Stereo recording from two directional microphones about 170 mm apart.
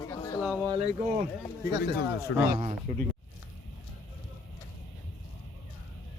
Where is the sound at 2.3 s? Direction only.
90° left.